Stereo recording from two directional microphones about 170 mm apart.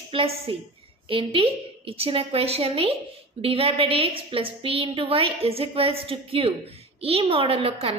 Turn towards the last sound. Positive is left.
turn(degrees=-35)  # may be behind; listen again after turning